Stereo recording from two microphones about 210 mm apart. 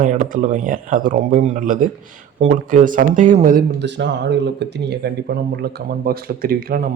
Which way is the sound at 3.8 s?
55° right (ahead or behind).